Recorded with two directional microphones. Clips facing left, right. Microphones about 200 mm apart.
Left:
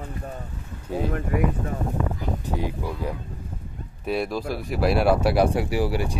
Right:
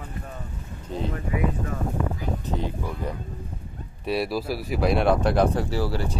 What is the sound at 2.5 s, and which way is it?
Speech, 10° left (ahead or behind).